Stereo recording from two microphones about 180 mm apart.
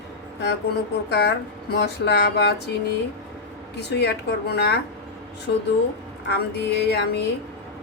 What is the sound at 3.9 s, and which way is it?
Speech, 65° left (ahead or behind).